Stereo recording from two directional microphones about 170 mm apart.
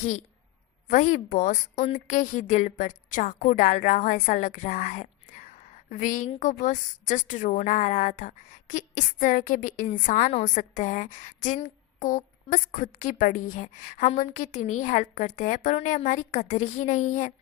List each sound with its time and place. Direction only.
0.9 s a woman's voice: 45° left (ahead or behind)